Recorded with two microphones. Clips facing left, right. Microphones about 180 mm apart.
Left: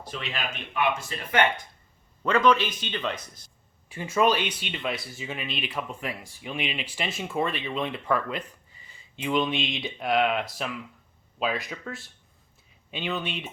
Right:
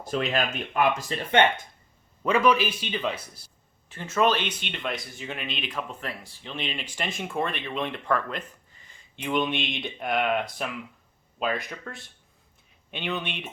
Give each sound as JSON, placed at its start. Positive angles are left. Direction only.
{"t": 0.1, "sound": "speech", "side_deg": -45}
{"t": 2.2, "sound": "speech", "side_deg": -10}
{"t": 3.8, "sound": "speech", "side_deg": 10}
{"t": 12.9, "sound": "speech", "side_deg": 0}